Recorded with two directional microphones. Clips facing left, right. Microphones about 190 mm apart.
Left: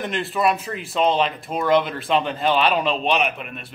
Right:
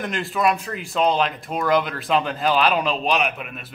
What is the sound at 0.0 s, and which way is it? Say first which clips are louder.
Speech: even; centre (ahead or behind).